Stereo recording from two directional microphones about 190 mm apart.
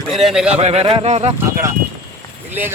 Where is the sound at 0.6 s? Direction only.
30° right (ahead or behind).